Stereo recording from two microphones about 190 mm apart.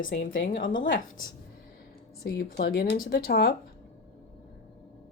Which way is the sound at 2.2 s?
55° left (ahead or behind).